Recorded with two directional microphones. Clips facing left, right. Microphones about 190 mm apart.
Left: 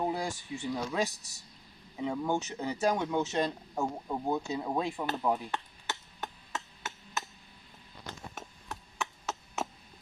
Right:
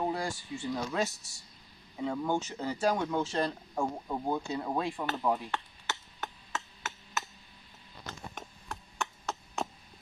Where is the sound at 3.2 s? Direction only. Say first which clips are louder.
Left 1 dB; 20° left (ahead or behind).